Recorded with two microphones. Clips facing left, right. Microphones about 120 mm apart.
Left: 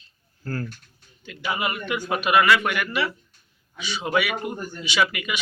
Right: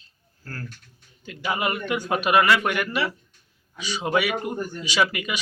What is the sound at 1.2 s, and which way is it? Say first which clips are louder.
A man's voice: right 1 dB; 40° right (ahead or behind).